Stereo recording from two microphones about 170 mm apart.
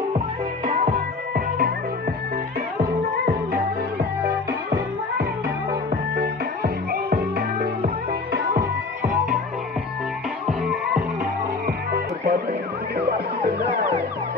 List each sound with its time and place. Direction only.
0.7 s music: 50° right (ahead or behind)
2.8 s music: 60° right (ahead or behind)
6.1 s music: 65° right (ahead or behind)
11.6 s music: 55° right (ahead or behind)
13.4 s music: 55° right (ahead or behind)